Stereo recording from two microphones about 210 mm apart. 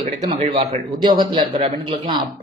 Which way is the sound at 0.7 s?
20° right (ahead or behind).